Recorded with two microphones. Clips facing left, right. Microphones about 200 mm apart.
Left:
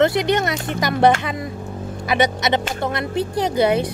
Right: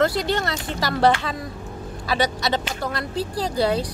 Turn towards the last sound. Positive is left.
turn(degrees=20)  # may be behind; listen again after turning